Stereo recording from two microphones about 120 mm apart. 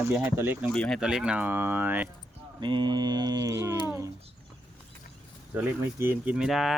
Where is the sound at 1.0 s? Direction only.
5° right (ahead or behind).